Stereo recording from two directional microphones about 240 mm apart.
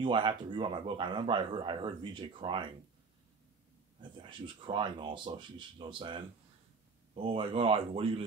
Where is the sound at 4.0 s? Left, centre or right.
Centre.